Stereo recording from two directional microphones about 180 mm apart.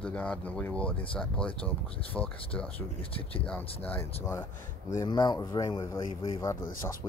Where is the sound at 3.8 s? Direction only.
10° left (ahead or behind).